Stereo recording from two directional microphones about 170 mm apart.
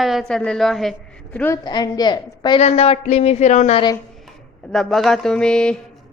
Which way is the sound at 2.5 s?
40° left (ahead or behind).